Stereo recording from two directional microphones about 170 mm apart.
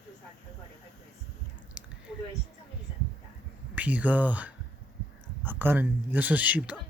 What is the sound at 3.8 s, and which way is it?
Speech, 10° right (ahead or behind).